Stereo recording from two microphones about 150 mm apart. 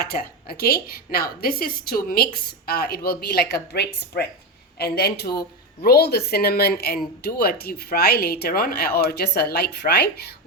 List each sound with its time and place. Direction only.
0.0 s a woman's voice: 85° left